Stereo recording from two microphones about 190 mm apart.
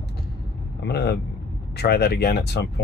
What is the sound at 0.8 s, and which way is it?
Vehicle, 60° left (ahead or behind).